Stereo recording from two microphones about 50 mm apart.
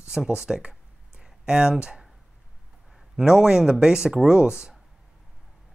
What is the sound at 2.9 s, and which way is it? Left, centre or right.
Speech, centre.